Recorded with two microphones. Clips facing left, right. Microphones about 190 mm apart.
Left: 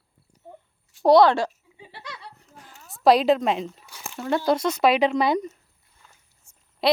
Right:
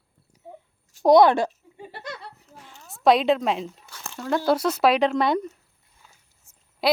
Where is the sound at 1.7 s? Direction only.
50° right (ahead or behind).